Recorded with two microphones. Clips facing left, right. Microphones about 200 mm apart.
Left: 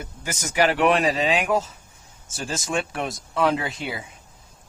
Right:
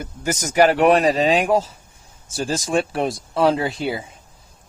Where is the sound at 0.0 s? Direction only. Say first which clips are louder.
Right 7 dB; 40° right (ahead or behind).